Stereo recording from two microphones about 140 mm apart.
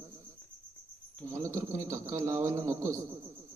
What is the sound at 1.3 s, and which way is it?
A man's voice, 20° right (ahead or behind).